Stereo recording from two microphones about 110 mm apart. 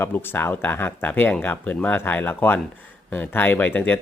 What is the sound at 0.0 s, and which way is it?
Speech, 20° left (ahead or behind).